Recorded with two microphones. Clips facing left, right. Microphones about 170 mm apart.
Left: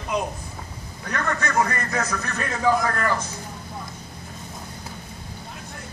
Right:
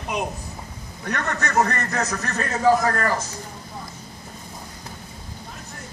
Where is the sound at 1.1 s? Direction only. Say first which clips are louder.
Even; 40° right (ahead or behind).